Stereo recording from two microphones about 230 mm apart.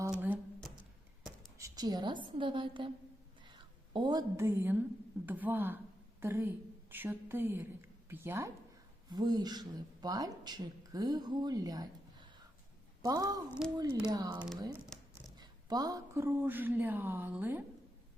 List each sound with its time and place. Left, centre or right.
0.1 s a sound: centre
1.5 s a woman's voice: centre
3.9 s a woman's voice: centre
13.0 s a woman's voice: centre
14.3 s speech: centre
14.9 s a sound: centre
15.4 s speech: centre